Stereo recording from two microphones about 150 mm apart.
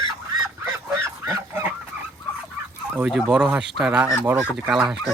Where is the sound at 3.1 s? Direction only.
5° right (ahead or behind).